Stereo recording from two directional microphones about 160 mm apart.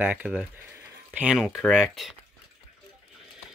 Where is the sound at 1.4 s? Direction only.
5° left (ahead or behind).